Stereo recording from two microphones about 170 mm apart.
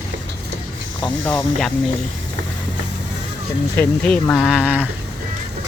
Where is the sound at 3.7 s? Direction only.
10° left (ahead or behind).